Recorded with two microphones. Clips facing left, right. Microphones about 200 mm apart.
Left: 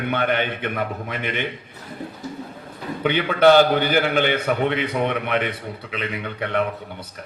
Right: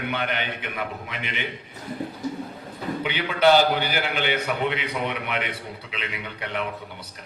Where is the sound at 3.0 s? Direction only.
50° left (ahead or behind).